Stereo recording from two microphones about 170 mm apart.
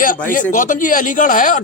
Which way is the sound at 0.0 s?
55° left (ahead or behind).